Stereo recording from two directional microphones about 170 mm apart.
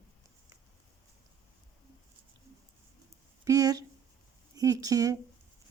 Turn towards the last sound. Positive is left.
turn(degrees=-20)  # may be behind; listen again after turning